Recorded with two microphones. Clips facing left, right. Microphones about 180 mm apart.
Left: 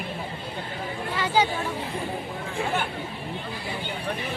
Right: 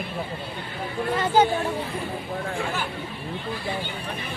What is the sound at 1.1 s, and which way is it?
Chatter, 50° right (ahead or behind).